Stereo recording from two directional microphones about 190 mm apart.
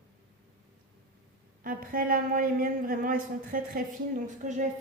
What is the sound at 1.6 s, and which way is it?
Speech, 50° right (ahead or behind).